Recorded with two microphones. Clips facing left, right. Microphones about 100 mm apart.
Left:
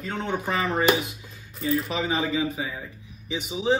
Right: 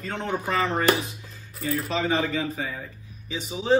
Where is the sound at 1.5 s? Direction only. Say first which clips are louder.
Left 1 dB; centre (ahead or behind).